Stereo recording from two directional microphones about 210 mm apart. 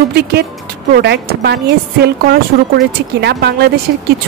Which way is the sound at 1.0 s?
50° right (ahead or behind).